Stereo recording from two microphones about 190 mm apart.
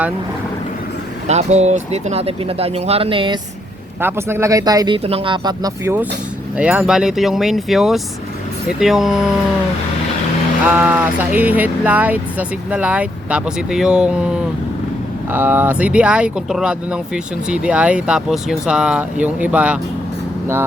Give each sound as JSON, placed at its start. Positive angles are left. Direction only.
{"t": 1.3, "sound": "speech", "side_deg": -35}
{"t": 4.0, "sound": "speech", "side_deg": -15}
{"t": 10.7, "sound": "speech", "side_deg": -10}
{"t": 15.3, "sound": "speech", "side_deg": -10}